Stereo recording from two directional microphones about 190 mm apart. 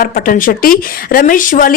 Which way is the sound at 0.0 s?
50° left (ahead or behind).